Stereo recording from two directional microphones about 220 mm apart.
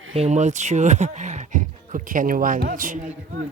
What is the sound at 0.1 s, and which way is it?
Speech, 30° right (ahead or behind).